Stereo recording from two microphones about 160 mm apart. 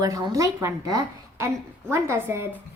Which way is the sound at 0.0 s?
25° right (ahead or behind).